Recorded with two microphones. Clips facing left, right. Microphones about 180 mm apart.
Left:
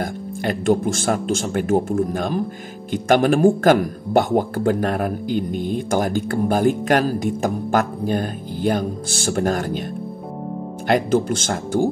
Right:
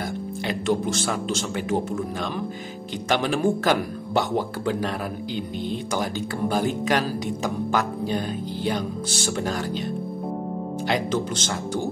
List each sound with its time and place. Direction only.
0.0 s speech: 50° left (ahead or behind)
10.9 s speech: 50° left (ahead or behind)